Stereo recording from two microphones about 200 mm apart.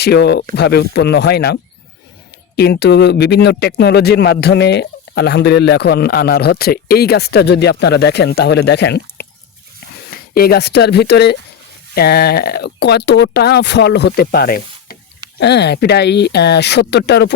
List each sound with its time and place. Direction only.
0.0 s speech: 55° left (ahead or behind)
2.6 s speech: 55° left (ahead or behind)